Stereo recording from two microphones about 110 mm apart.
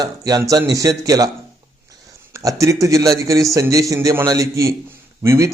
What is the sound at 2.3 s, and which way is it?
A man's voice, 30° right (ahead or behind).